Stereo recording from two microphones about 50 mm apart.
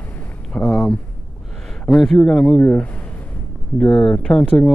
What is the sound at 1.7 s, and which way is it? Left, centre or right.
Speech, centre.